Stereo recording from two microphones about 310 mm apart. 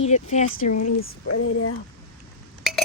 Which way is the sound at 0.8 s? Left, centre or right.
Left.